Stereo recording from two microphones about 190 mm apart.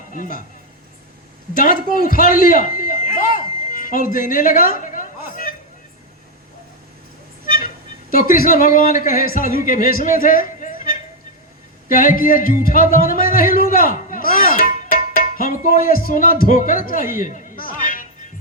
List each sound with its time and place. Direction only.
0.1 s speech: 45° left (ahead or behind)
1.5 s a man's voice: 45° left (ahead or behind)
3.3 s a sound: 45° left (ahead or behind)
7.4 s vehicle: 45° left (ahead or behind)
8.1 s speech: 45° left (ahead or behind)